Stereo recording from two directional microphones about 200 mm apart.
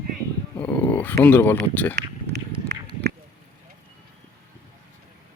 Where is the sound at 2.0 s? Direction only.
55° right (ahead or behind).